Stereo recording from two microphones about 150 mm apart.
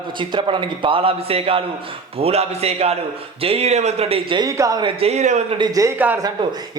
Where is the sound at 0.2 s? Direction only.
30° right (ahead or behind).